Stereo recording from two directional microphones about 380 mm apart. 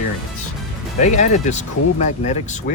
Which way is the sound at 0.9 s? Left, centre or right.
Centre.